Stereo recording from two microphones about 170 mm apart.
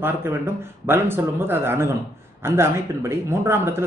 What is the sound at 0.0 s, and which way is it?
Speech, 15° right (ahead or behind).